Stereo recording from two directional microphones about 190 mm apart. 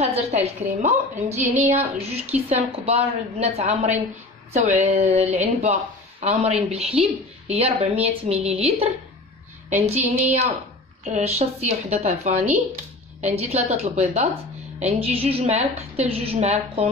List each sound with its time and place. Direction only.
0.0 s a woman's voice: 35° right (ahead or behind)
9.8 s a woman's voice: 35° right (ahead or behind)